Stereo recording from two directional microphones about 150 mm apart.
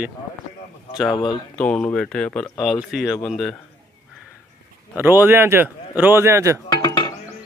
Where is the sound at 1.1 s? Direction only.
30° left (ahead or behind).